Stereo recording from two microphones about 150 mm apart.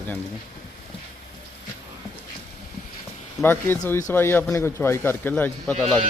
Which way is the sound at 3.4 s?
15° left (ahead or behind).